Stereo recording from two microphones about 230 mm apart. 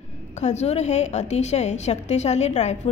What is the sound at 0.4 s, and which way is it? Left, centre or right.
A woman's voice, left.